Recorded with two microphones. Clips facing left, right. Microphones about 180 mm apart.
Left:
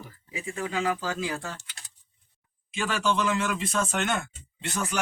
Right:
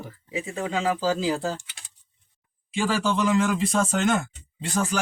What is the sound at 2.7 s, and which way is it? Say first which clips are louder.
A man's voice: right 3 dB; 30° right (ahead or behind).